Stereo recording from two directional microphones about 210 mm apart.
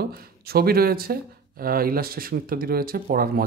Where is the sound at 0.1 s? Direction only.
45° right (ahead or behind).